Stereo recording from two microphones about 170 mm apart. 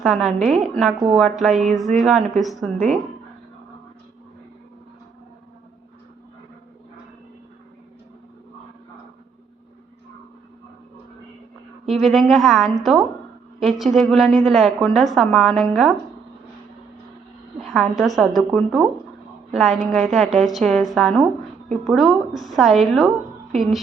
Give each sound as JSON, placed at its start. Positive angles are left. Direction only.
{"t": 0.0, "sound": "a woman's voice", "side_deg": 0}
{"t": 2.7, "sound": "speech", "side_deg": -45}
{"t": 11.9, "sound": "a woman's voice", "side_deg": 0}
{"t": 17.6, "sound": "a woman's voice", "side_deg": 0}